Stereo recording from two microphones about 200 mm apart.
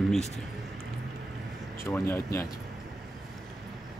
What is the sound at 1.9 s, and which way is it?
Speech, 10° left (ahead or behind).